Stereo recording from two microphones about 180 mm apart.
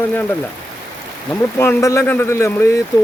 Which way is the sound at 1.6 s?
15° left (ahead or behind).